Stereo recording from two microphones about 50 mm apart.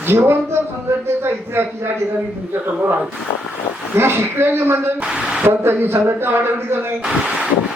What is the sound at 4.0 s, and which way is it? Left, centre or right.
Speech, right.